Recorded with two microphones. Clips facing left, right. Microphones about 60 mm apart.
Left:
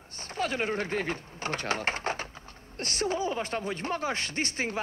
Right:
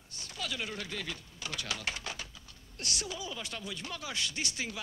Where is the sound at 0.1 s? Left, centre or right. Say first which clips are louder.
Left 9 dB; left.